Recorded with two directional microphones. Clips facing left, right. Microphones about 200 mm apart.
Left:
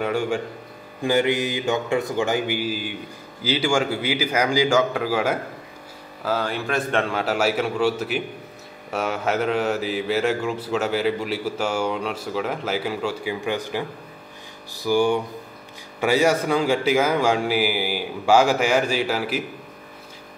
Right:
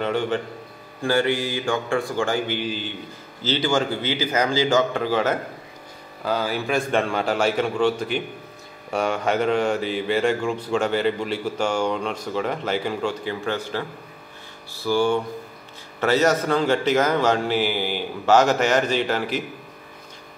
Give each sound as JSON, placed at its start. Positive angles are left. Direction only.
{"t": 0.0, "sound": "a man's voice", "side_deg": 10}